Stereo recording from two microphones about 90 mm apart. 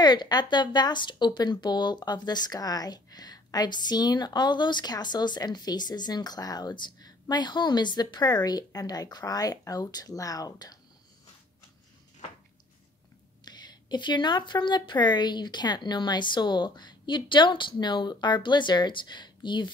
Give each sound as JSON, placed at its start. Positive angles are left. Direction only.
{"t": 0.0, "sound": "a woman's voice", "side_deg": 50}
{"t": 13.5, "sound": "speech", "side_deg": 55}